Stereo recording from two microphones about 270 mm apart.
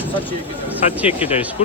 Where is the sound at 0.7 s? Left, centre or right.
Centre.